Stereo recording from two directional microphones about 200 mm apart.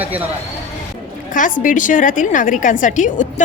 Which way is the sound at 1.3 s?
40° left (ahead or behind).